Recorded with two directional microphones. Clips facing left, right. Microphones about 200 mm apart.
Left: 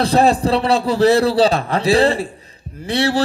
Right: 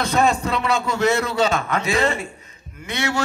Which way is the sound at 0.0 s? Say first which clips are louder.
Left 5 dB; 35° left (ahead or behind).